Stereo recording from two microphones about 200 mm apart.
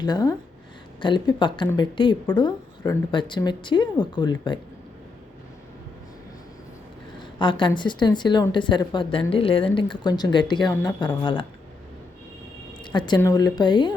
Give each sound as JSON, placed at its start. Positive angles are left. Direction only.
{"t": 0.0, "sound": "speech", "side_deg": 20}
{"t": 7.2, "sound": "a sound", "side_deg": 25}
{"t": 7.8, "sound": "speech", "side_deg": 20}
{"t": 12.8, "sound": "speech", "side_deg": 20}